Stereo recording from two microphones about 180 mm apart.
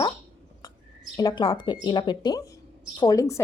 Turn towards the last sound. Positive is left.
turn(degrees=20)  # may be behind; listen again after turning